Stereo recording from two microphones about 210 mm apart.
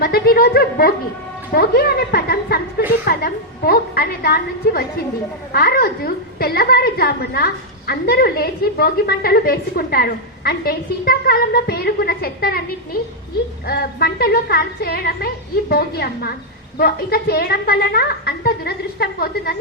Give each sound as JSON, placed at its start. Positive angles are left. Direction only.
{"t": 0.0, "sound": "a woman's voice", "side_deg": 45}